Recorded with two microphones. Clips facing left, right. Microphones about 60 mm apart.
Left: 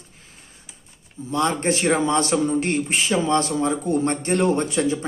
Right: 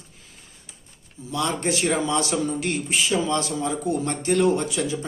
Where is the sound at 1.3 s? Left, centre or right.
Left.